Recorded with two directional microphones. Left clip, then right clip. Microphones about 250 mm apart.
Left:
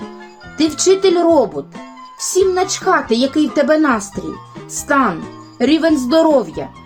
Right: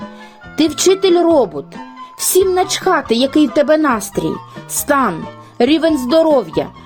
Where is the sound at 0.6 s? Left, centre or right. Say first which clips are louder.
Right 1 dB; right.